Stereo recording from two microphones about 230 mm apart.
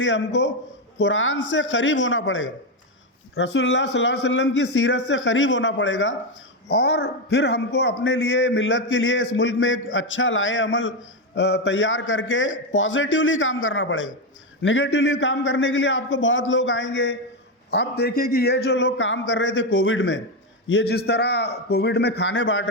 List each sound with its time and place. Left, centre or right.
0.0 s a man's voice: left